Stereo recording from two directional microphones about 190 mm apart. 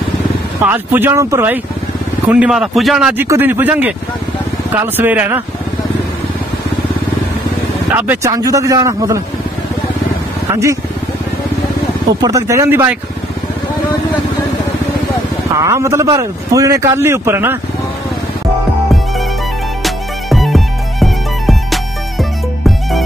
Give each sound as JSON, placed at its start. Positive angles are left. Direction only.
{"t": 0.7, "sound": "a man's voice", "side_deg": -10}
{"t": 4.9, "sound": "a man's voice", "side_deg": -10}
{"t": 7.9, "sound": "a man's voice", "side_deg": -15}
{"t": 10.5, "sound": "speech", "side_deg": -15}
{"t": 12.2, "sound": "a man's voice", "side_deg": -15}
{"t": 15.6, "sound": "a man's voice", "side_deg": -15}
{"t": 19.8, "sound": "music", "side_deg": 0}